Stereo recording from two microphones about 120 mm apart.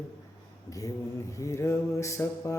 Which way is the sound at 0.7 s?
25° left (ahead or behind).